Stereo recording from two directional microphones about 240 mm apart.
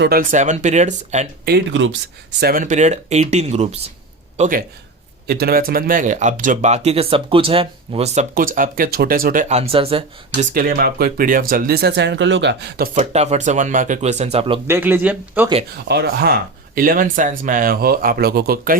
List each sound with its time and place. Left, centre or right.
0.0 s speech: right
1.5 s speech: right
2.4 s speech: right
10.5 s speech: right
14.7 s speech: centre
15.9 s speech: right